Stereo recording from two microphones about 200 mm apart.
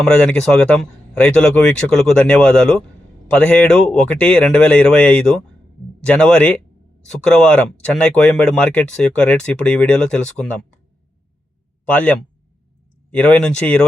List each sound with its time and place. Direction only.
0.0 s speech: 5° left (ahead or behind)
11.9 s speech: 5° left (ahead or behind)